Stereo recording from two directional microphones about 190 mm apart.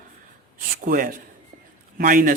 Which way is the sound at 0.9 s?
45° right (ahead or behind).